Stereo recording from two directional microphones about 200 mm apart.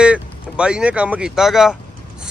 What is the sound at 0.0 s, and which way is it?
Speech, 5° right (ahead or behind).